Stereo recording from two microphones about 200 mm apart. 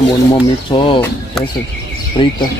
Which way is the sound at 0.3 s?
25° left (ahead or behind).